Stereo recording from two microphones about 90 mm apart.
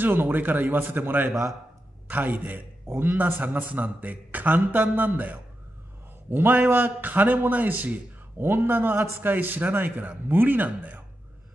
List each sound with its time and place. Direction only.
0.0 s a man's voice: 20° right (ahead or behind)